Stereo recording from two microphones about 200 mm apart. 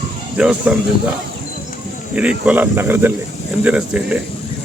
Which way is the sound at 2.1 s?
5° right (ahead or behind).